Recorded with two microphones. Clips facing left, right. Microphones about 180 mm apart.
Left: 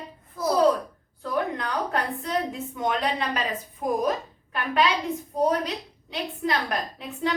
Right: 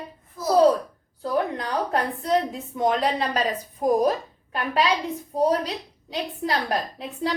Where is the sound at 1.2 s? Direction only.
35° right (ahead or behind).